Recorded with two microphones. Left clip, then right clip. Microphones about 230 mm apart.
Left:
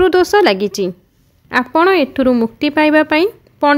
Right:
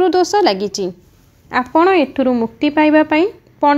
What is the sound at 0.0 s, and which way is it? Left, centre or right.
A woman's voice, left.